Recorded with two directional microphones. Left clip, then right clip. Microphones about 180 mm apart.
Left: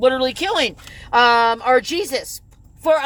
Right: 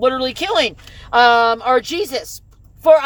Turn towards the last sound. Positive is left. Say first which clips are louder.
# right 6 dB
turn(degrees=-10)  # may be behind; listen again after turning